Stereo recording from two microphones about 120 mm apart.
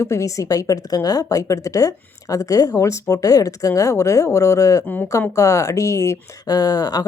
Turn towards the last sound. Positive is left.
turn(degrees=35)  # may be behind; listen again after turning